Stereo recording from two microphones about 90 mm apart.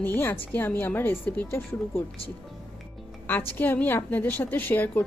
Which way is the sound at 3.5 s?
20° left (ahead or behind).